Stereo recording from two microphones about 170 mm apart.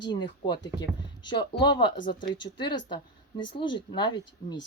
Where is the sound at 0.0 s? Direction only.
25° left (ahead or behind).